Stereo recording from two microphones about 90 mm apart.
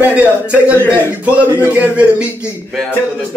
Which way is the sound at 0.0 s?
15° right (ahead or behind).